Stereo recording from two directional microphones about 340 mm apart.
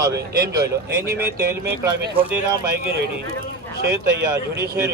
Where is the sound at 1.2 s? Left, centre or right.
Centre.